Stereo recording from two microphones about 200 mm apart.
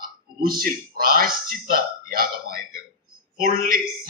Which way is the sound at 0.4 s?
45° right (ahead or behind).